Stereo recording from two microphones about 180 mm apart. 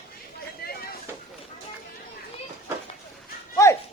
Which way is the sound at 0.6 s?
60° left (ahead or behind).